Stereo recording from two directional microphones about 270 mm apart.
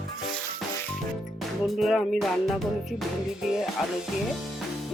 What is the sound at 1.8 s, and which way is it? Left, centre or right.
Music, centre.